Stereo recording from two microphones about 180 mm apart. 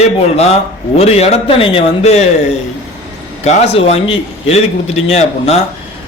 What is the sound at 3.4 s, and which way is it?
A man's voice, 35° left (ahead or behind).